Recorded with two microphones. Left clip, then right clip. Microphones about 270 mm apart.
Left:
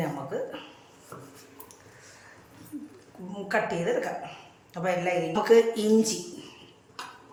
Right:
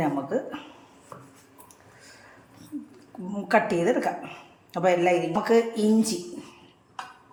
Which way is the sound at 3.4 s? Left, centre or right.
Right.